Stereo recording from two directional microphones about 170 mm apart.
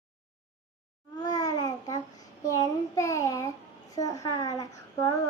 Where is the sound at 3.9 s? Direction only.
20° left (ahead or behind).